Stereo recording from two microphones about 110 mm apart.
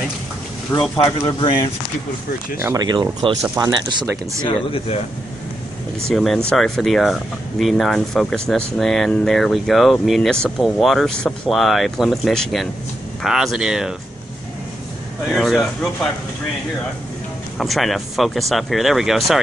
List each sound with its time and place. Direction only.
0.7 s speech: 20° left (ahead or behind)
1.4 s speech: 40° left (ahead or behind)
2.8 s speech: 40° right (ahead or behind)
3.6 s speech: 30° right (ahead or behind)
4.5 s speech: 60° left (ahead or behind)
6.0 s speech: 5° left (ahead or behind)
15.3 s speech: centre (ahead or behind)
17.6 s speech: centre (ahead or behind)